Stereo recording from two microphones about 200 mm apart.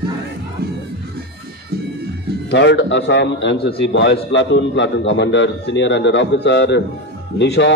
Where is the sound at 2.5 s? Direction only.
60° left (ahead or behind).